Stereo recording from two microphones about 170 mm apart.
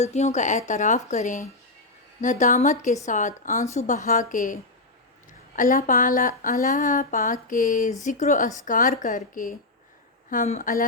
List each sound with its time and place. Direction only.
0.0 s speech: 40° left (ahead or behind)
5.5 s speech: 50° left (ahead or behind)